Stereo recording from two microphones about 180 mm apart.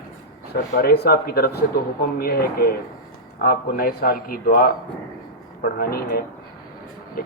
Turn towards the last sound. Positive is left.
turn(degrees=55)  # may be behind; listen again after turning